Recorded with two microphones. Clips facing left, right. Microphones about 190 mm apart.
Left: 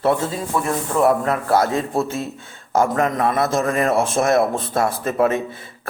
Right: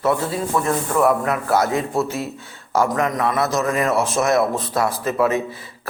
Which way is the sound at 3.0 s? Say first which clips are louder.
Left 1 dB; 45° left (ahead or behind).